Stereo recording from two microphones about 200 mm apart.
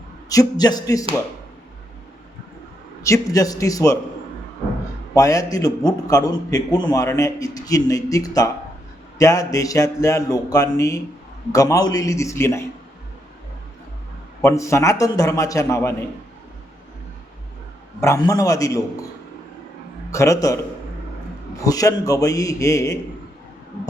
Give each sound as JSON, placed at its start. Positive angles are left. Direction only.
{"t": 0.3, "sound": "a man's voice", "side_deg": 20}
{"t": 3.0, "sound": "a man's voice", "side_deg": 15}
{"t": 5.1, "sound": "a man's voice", "side_deg": 15}
{"t": 14.4, "sound": "a man's voice", "side_deg": 15}
{"t": 18.0, "sound": "a man's voice", "side_deg": 15}
{"t": 20.1, "sound": "a man's voice", "side_deg": 15}
{"t": 21.6, "sound": "a man's voice", "side_deg": 15}